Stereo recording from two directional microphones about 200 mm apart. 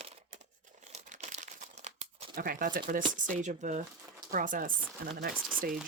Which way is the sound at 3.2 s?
40° right (ahead or behind).